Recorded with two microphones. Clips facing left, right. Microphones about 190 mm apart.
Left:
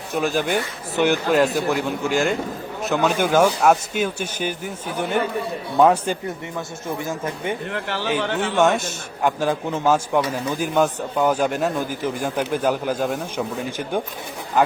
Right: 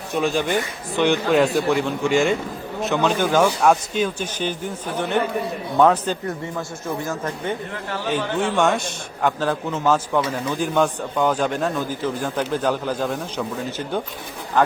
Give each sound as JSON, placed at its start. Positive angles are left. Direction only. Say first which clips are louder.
{"t": 0.1, "sound": "a man's voice", "louder": "even", "side_deg": 0}
{"t": 7.7, "sound": "speech", "louder": "left 2 dB", "side_deg": 80}
{"t": 8.1, "sound": "a man's voice", "louder": "right 1 dB", "side_deg": 0}